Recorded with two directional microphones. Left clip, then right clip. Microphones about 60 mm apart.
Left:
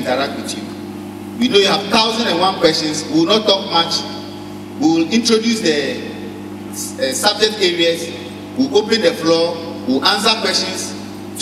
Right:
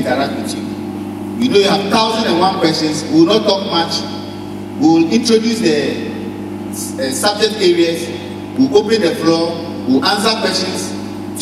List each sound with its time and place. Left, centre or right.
1.4 s a man's voice: left
7.2 s a man's voice: left